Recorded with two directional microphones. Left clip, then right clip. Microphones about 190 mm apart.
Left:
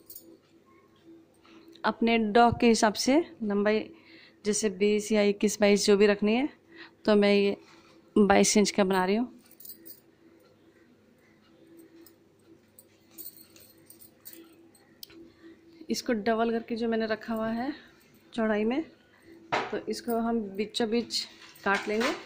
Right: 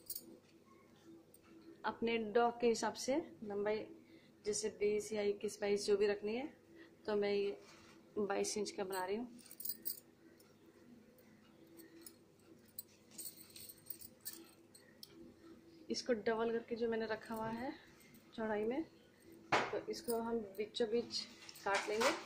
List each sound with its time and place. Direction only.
1.8 s a woman's voice: 50° left (ahead or behind)
15.9 s a woman's voice: 50° left (ahead or behind)
19.9 s a woman's voice: 50° left (ahead or behind)